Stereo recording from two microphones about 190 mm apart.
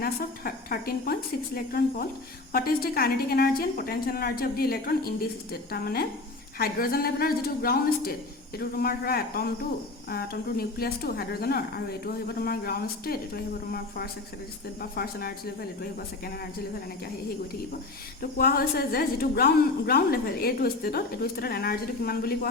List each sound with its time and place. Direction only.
0.0 s a woman's voice: 50° left (ahead or behind)
18.2 s a woman's voice: 50° left (ahead or behind)